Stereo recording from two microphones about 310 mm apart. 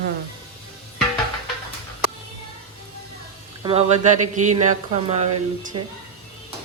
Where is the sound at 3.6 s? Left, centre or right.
Centre.